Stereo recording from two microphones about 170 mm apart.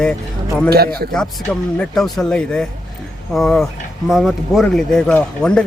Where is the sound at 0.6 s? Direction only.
65° right (ahead or behind).